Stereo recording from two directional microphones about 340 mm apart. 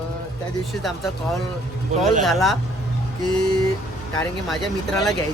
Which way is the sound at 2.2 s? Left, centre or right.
Centre.